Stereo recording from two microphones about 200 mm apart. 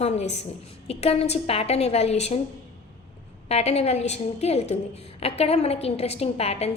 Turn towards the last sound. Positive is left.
turn(degrees=30)  # may be behind; listen again after turning